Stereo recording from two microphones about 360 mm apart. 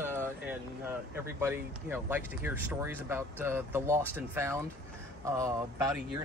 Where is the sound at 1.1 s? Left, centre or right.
Centre.